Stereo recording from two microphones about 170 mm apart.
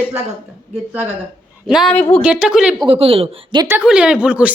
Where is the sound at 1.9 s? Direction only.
35° left (ahead or behind).